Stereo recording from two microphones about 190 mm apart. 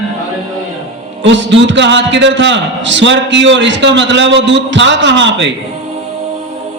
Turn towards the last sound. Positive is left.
turn(degrees=-70)  # may be behind; listen again after turning